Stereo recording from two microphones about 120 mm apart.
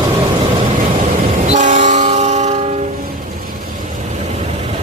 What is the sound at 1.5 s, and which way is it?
Train, 90° right.